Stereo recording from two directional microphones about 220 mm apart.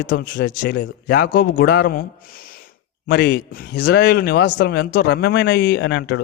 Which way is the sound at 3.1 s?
50° left (ahead or behind).